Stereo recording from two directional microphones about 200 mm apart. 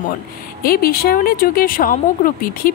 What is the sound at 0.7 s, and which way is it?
A woman's voice, 50° left (ahead or behind).